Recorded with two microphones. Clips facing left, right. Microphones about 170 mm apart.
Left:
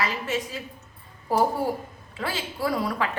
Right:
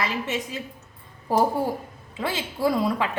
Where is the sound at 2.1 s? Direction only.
20° right (ahead or behind).